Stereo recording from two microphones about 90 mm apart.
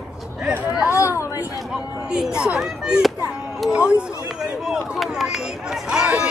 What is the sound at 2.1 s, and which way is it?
Speech, 10° right (ahead or behind).